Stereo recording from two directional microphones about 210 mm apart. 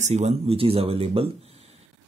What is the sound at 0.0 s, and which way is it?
Speech, 30° right (ahead or behind).